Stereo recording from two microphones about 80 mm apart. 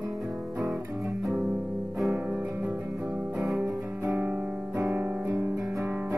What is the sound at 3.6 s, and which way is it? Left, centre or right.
Music, right.